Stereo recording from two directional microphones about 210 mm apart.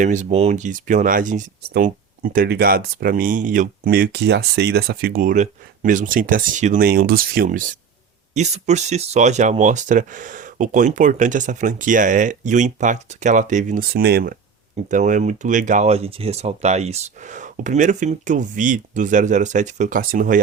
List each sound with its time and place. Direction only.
0.0 s speech: 35° right (ahead or behind)
14.8 s speech: 35° right (ahead or behind)